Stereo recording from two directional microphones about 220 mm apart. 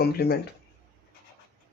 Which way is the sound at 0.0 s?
45° left (ahead or behind).